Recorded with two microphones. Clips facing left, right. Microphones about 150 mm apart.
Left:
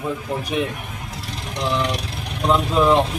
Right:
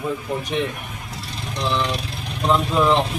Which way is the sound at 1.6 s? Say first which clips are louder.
Left 1 dB; 15° left (ahead or behind).